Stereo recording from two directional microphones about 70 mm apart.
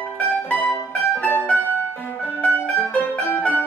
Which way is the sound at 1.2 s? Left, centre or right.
Left.